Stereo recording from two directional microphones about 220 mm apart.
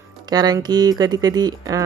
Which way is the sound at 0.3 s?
20° right (ahead or behind).